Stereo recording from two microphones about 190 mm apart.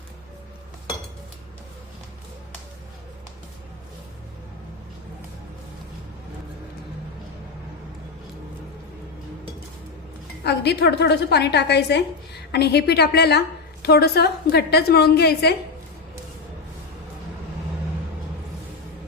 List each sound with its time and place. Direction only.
10.4 s a woman's voice: 60° left (ahead or behind)